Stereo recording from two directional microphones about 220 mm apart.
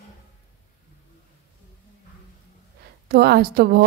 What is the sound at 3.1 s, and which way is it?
Speech, 45° right (ahead or behind).